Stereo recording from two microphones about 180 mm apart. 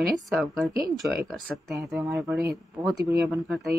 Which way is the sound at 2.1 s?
Centre (ahead or behind).